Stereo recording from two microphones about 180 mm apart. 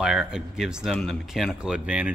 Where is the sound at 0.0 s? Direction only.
5° right (ahead or behind).